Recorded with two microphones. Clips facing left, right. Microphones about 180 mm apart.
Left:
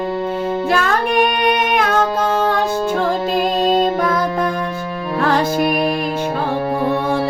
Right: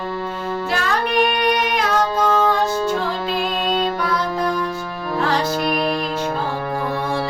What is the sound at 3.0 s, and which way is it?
Music, 45° left (ahead or behind).